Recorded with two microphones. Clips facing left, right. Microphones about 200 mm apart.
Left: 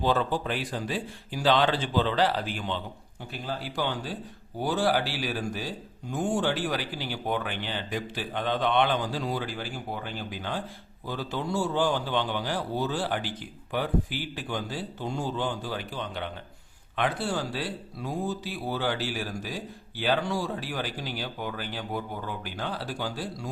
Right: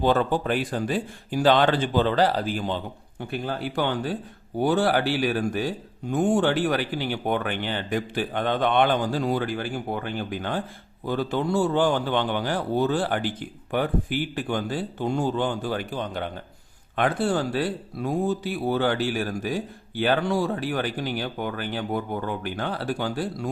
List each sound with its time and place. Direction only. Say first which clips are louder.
0.0 s speech: right 4 dB; 55° right (ahead or behind)
3.3 s speech: right 5 dB; 60° right (ahead or behind)